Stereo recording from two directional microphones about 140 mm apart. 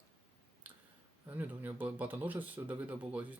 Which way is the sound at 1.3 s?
15° right (ahead or behind).